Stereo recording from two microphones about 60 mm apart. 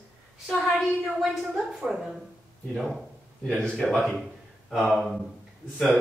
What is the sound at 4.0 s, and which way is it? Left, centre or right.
Speech, centre.